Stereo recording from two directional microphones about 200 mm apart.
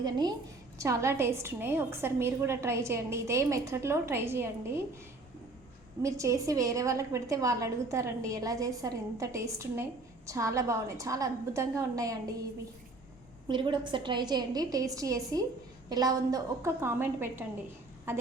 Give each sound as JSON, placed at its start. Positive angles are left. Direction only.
{"t": 0.0, "sound": "a woman's voice", "side_deg": -20}
{"t": 6.0, "sound": "a woman's voice", "side_deg": -15}
{"t": 13.5, "sound": "a woman's voice", "side_deg": -25}